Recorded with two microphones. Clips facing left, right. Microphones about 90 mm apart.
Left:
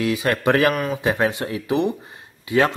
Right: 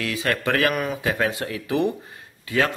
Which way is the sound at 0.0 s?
20° left (ahead or behind).